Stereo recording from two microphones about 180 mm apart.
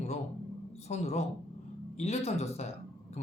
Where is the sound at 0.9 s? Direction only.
35° left (ahead or behind).